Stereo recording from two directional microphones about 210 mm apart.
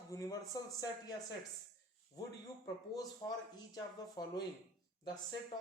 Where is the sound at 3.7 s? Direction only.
20° left (ahead or behind).